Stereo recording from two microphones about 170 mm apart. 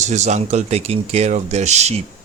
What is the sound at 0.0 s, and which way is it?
Speech, 45° right (ahead or behind).